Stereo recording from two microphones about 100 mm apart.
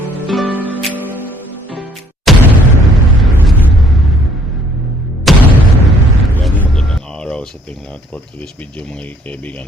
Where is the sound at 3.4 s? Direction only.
Centre (ahead or behind).